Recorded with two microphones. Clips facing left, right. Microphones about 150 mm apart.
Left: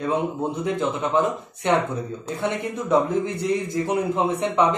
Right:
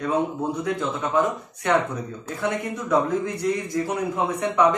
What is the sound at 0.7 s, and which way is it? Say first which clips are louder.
Speech: left 3 dB; 25° left (ahead or behind).